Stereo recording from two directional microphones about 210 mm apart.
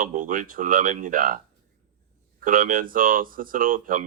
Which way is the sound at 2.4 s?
40° right (ahead or behind).